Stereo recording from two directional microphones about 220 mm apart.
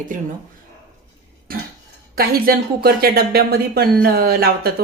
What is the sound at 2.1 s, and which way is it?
Speech, 45° right (ahead or behind).